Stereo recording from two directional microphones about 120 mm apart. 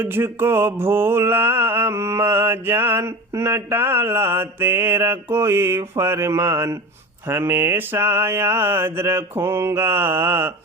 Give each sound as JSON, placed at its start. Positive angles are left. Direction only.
{"t": 0.0, "sound": "mantra", "side_deg": -20}